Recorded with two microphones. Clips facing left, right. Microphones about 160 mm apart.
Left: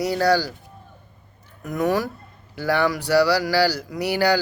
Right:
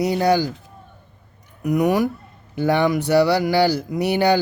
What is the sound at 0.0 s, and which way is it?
Mantra, 20° right (ahead or behind).